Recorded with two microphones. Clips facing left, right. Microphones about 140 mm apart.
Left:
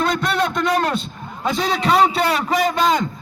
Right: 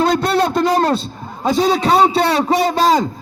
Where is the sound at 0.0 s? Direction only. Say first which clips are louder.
Right 5 dB; 35° right (ahead or behind).